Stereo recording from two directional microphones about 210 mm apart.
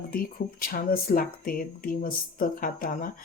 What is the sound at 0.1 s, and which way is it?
Speech, 45° left (ahead or behind).